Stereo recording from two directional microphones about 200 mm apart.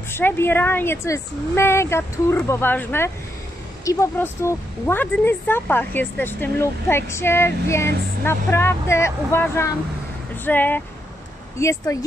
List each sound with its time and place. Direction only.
0.1 s speech: 10° left (ahead or behind)